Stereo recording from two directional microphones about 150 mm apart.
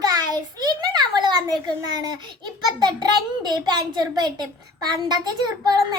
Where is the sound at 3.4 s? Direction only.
25° right (ahead or behind).